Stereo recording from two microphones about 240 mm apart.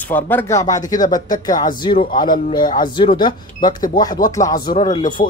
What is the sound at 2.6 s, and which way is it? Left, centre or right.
Speech, left.